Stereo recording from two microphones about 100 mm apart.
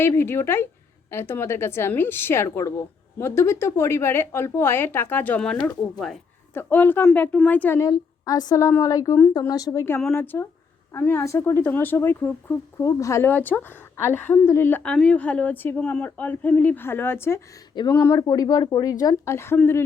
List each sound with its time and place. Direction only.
0.0 s a woman's voice: 25° left (ahead or behind)
5.6 s speech: 5° left (ahead or behind)
6.5 s a woman's voice: 20° left (ahead or behind)
7.8 s speech: 35° left (ahead or behind)
10.1 s a woman's voice: 20° left (ahead or behind)
12.8 s a woman's voice: 35° left (ahead or behind)
14.9 s speech: 10° left (ahead or behind); by 19.5 s 25° left (ahead or behind)